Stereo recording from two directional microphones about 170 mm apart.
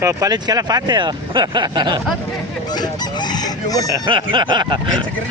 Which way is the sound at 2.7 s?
25° left (ahead or behind).